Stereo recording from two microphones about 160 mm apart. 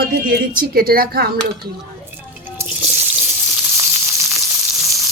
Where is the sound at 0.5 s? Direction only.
65° right (ahead or behind).